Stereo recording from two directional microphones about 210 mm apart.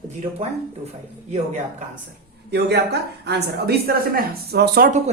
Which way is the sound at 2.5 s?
50° right (ahead or behind).